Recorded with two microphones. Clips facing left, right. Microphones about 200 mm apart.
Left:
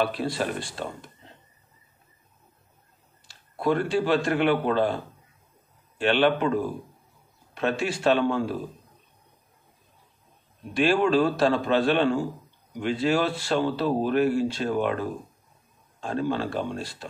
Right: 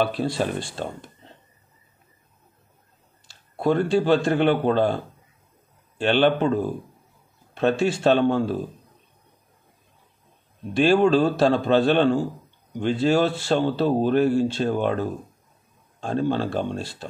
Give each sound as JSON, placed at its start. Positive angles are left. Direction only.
{"t": 0.0, "sound": "speech", "side_deg": -30}
{"t": 3.3, "sound": "speech", "side_deg": -25}
{"t": 5.9, "sound": "speech", "side_deg": -30}
{"t": 10.7, "sound": "speech", "side_deg": -25}